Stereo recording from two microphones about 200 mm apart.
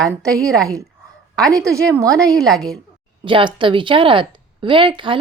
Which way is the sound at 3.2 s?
25° right (ahead or behind).